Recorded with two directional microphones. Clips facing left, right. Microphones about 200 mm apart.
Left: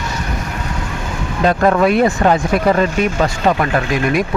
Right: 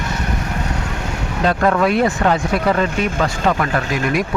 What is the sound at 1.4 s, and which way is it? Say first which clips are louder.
Speech: left 3 dB; 20° left (ahead or behind).